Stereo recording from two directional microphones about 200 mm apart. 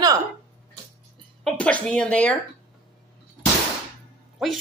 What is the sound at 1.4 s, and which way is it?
Speech, 5° left (ahead or behind).